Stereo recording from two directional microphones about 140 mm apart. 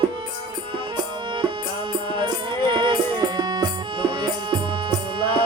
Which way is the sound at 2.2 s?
35° right (ahead or behind).